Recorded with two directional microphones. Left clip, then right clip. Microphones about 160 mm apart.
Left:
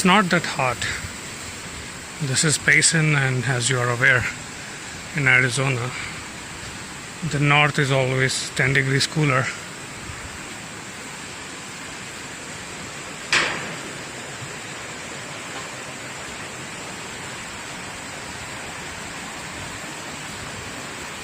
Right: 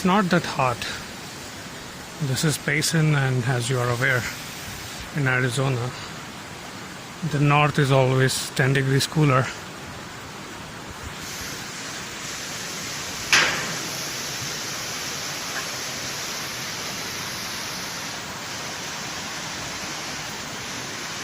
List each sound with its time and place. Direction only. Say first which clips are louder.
0.0 s speech: left 4 dB; 5° left (ahead or behind)
0.3 s speech: left 1 dB; 15° right (ahead or behind)
2.3 s speech: left 7 dB; 5° right (ahead or behind)
7.4 s speech: left 2 dB; 15° right (ahead or behind)
8.8 s speech: left 1 dB; 10° right (ahead or behind)